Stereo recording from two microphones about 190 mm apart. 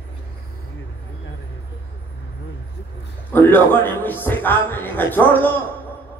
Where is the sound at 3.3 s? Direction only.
10° left (ahead or behind).